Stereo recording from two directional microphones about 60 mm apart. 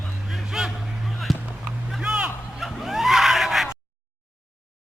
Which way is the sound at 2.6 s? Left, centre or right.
Centre.